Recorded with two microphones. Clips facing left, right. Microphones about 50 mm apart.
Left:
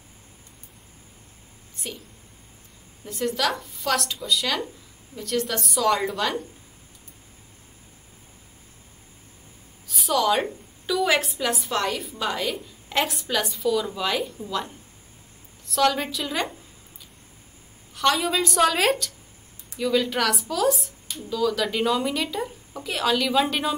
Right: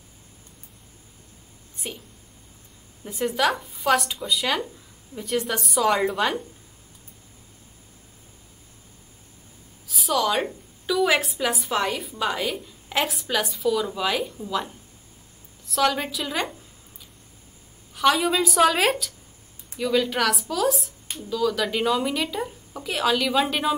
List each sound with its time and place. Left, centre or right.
3.1 s speech: centre
9.8 s a woman's voice: centre
17.9 s speech: centre